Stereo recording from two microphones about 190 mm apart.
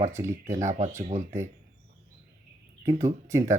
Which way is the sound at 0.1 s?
15° right (ahead or behind).